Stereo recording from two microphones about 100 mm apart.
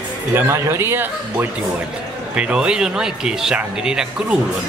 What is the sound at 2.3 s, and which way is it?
Speech, 10° right (ahead or behind).